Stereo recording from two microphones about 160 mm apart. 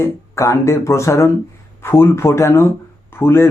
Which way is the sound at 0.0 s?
20° left (ahead or behind).